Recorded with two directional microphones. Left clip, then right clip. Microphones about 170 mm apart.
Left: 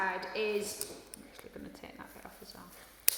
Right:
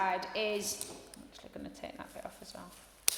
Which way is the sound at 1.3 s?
40° right (ahead or behind).